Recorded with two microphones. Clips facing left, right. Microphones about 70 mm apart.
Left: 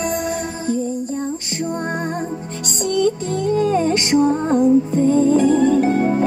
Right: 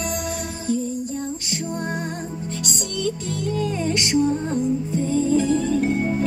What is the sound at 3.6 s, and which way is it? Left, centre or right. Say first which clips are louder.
Music: left 7 dB; left.